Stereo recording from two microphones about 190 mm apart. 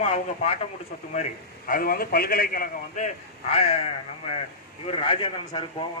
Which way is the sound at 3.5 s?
30° left (ahead or behind).